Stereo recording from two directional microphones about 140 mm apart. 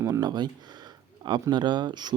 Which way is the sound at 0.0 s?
25° right (ahead or behind).